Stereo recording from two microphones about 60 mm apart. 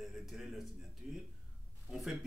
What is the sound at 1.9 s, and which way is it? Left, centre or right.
Speech, centre.